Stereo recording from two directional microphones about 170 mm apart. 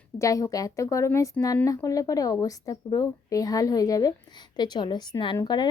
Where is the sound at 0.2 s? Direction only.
20° left (ahead or behind).